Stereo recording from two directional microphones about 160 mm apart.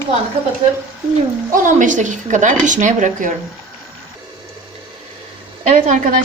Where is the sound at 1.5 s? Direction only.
55° right (ahead or behind).